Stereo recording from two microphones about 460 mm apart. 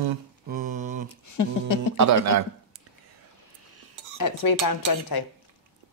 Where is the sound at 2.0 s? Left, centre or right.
Right.